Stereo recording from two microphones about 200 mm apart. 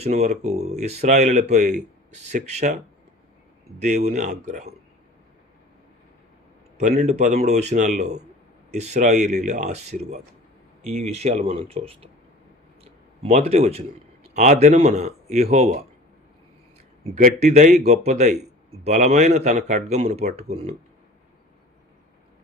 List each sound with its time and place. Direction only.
0.0 s a man's voice: 35° right (ahead or behind)
3.8 s a man's voice: 35° right (ahead or behind)
6.7 s a man's voice: 35° right (ahead or behind)
12.8 s a sound: 30° right (ahead or behind)
14.3 s a man's voice: 35° right (ahead or behind)
17.2 s a man's voice: 40° right (ahead or behind)